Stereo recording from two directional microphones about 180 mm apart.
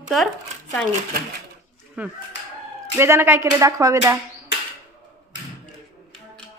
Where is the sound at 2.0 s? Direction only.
5° right (ahead or behind).